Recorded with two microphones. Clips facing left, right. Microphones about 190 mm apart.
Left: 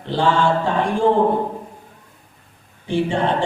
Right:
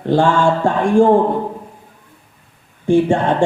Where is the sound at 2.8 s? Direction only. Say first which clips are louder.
Right 7 dB; 45° right (ahead or behind).